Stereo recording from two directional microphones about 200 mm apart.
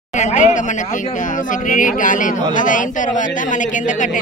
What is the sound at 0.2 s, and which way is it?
A woman's voice, 35° left (ahead or behind).